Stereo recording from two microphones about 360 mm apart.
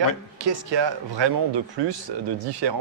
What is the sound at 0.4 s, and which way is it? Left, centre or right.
Speech, right.